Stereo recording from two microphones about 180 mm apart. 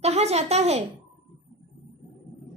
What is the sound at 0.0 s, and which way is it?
Speech, 35° right (ahead or behind).